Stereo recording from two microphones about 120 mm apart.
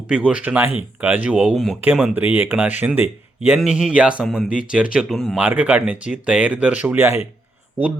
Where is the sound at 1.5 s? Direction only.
Centre (ahead or behind).